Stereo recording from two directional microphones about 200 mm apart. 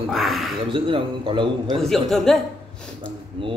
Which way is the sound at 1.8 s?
Centre (ahead or behind).